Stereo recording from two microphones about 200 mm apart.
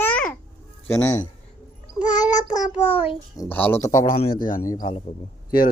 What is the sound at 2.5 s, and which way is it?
Child singing, 30° left (ahead or behind).